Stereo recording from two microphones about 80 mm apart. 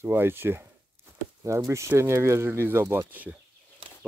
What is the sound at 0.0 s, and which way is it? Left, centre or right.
Speech, right.